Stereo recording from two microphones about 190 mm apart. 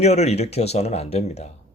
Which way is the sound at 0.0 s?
35° left (ahead or behind).